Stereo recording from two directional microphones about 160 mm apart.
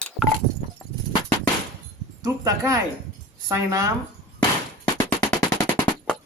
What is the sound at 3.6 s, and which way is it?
Speech, 20° right (ahead or behind).